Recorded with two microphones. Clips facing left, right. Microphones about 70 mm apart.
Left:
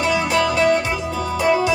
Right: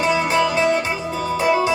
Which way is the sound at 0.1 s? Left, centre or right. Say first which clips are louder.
Even; right.